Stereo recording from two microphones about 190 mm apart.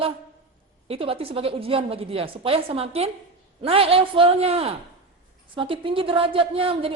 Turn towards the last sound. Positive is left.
turn(degrees=-30)  # may be behind; listen again after turning